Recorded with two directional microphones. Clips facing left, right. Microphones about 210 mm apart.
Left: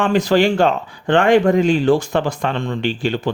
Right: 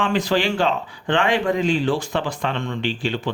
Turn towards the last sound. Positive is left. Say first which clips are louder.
# left 4 dB
turn(degrees=45)  # may be behind; listen again after turning